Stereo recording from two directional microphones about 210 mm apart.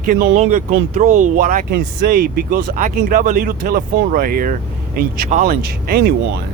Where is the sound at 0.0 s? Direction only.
40° right (ahead or behind).